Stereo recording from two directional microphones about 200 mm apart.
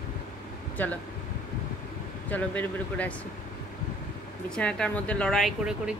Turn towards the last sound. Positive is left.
turn(degrees=-5)  # may be behind; listen again after turning